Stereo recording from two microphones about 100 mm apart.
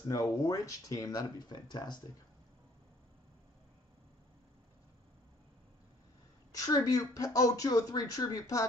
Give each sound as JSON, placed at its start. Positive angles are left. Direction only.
{"t": 0.0, "sound": "speech", "side_deg": 40}
{"t": 6.5, "sound": "speech", "side_deg": 35}